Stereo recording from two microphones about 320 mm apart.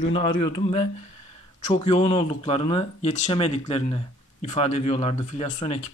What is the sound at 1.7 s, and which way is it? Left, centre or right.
Speech, centre.